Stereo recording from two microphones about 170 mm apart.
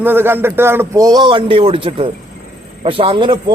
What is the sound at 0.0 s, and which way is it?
A man's voice, 10° right (ahead or behind).